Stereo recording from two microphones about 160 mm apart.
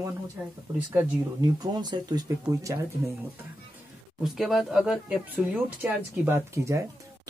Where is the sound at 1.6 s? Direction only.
25° right (ahead or behind).